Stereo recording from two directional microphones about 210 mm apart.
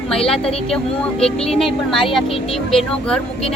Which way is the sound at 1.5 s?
Centre (ahead or behind).